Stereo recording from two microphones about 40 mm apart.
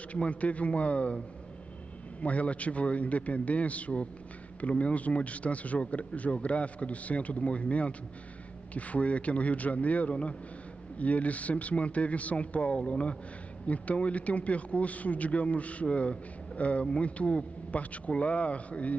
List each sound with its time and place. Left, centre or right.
0.1 s a man's voice: left
2.2 s a man's voice: left